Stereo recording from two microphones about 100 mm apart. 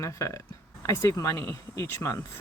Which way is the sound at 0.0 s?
30° left (ahead or behind).